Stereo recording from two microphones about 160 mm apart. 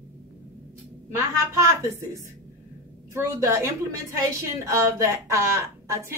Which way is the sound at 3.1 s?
15° right (ahead or behind).